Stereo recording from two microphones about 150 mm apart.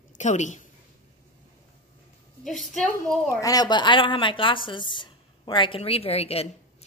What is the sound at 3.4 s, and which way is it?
A woman's voice, 25° left (ahead or behind).